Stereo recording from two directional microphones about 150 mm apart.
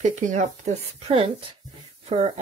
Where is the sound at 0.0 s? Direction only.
55° right (ahead or behind).